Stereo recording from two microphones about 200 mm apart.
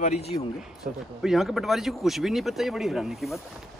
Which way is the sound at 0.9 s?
45° right (ahead or behind).